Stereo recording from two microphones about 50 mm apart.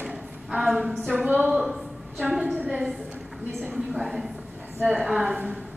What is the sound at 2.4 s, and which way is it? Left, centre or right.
Speech, right.